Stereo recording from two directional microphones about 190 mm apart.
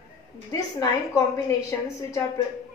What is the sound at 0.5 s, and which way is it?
Speech, 15° left (ahead or behind).